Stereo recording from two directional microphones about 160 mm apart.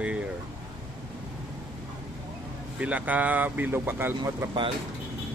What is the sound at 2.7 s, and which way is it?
Speech, 10° right (ahead or behind).